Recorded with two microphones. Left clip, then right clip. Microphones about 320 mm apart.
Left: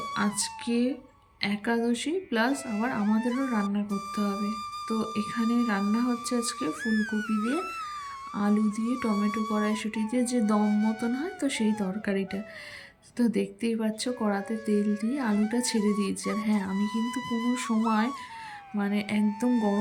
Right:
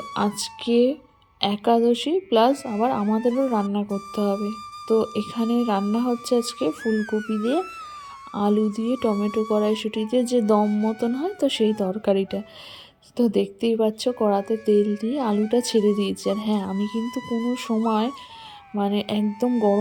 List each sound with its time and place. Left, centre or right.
0.3 s speech: centre